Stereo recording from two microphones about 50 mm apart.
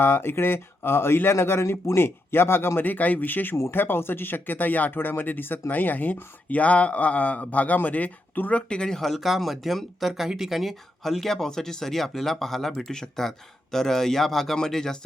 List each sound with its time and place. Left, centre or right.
0.0 s a man's voice: left; by 9.0 s centre
9.0 s speech: centre